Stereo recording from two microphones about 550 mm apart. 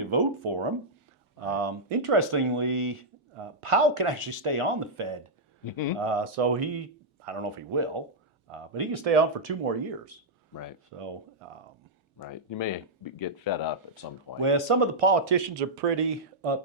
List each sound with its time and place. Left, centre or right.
0.0 s speech: right
1.5 s speech: right
5.6 s speech: left
6.0 s speech: right
10.5 s speech: left
10.9 s speech: right
12.3 s speech: left
14.4 s speech: right